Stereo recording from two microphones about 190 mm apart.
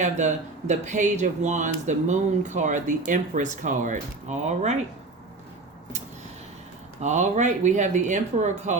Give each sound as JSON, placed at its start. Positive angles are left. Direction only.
{"t": 0.0, "sound": "speech", "side_deg": -40}
{"t": 7.0, "sound": "speech", "side_deg": -40}